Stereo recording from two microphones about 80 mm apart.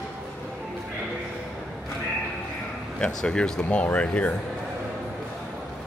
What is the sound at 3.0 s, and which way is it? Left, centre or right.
Speech, centre.